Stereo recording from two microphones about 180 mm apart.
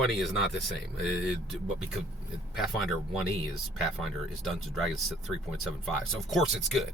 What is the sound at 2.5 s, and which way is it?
Speech, centre (ahead or behind).